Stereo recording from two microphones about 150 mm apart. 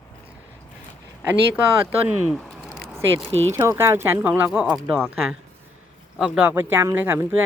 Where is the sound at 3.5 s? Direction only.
20° right (ahead or behind).